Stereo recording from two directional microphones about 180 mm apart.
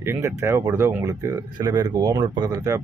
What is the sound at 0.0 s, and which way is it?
Speech, 15° right (ahead or behind).